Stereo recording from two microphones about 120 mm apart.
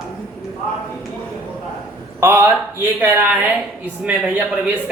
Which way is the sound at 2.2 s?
20° right (ahead or behind).